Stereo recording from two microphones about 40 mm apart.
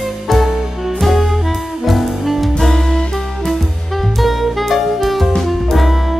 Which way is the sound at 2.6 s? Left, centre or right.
Centre.